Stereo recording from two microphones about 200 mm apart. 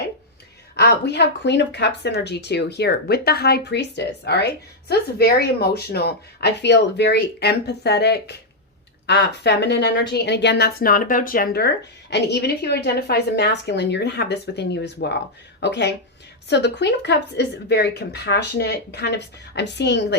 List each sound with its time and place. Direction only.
0.8 s a woman's voice: 55° left (ahead or behind)